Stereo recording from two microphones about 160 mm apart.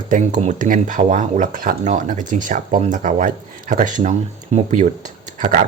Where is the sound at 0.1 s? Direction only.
50° right (ahead or behind).